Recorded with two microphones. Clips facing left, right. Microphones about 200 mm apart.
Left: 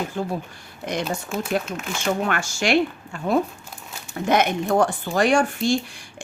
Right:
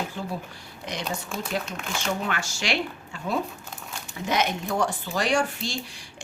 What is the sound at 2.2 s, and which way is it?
Speech, 50° left (ahead or behind).